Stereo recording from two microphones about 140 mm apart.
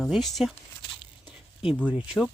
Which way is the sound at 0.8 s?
35° left (ahead or behind).